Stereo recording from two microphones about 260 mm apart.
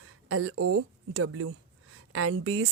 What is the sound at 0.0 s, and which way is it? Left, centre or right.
Speech, right.